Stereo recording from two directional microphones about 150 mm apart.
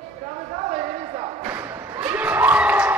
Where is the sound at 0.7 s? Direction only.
40° right (ahead or behind).